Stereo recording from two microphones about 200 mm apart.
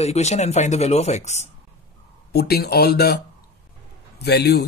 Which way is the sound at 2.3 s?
50° left (ahead or behind).